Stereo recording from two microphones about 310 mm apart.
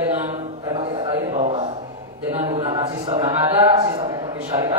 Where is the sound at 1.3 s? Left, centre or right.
Right.